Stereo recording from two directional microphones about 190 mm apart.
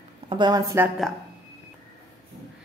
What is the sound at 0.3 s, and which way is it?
Speech, 20° right (ahead or behind).